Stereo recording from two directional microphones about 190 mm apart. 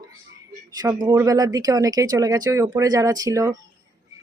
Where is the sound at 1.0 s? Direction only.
15° right (ahead or behind).